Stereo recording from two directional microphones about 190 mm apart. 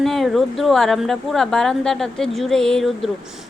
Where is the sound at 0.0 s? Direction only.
Centre (ahead or behind).